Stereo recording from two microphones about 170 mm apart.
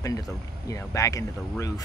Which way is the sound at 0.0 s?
20° left (ahead or behind).